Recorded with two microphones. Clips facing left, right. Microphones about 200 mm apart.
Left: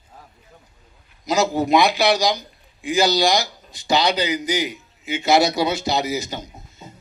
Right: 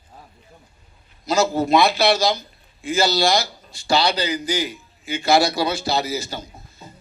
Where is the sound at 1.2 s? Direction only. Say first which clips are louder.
Even; 15° left (ahead or behind).